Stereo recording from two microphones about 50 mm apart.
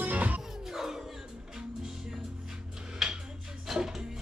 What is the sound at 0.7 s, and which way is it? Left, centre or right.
Music, centre.